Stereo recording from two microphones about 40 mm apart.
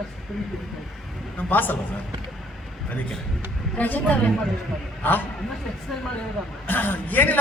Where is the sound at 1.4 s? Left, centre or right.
Left.